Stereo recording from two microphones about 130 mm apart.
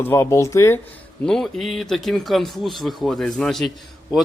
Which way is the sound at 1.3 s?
5° left (ahead or behind).